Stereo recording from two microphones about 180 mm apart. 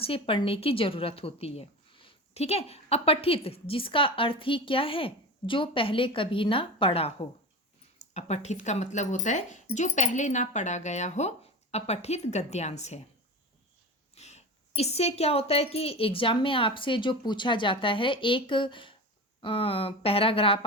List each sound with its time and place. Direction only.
0.0 s a woman's voice: 30° left (ahead or behind)
14.2 s a woman's voice: 40° left (ahead or behind)